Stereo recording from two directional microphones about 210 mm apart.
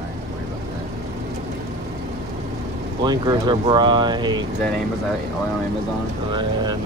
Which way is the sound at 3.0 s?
20° right (ahead or behind).